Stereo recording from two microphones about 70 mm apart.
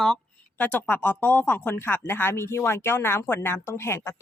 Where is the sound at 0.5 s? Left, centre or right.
Left.